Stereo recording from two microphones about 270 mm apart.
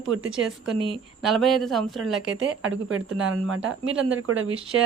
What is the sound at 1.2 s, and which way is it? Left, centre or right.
Speech, centre.